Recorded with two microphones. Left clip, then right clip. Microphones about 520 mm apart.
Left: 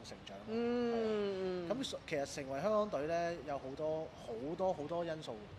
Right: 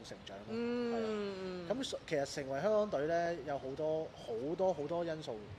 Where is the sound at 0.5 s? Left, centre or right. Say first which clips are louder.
Left 1 dB; left.